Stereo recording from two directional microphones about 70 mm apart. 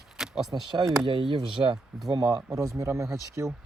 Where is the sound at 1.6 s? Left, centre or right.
Right.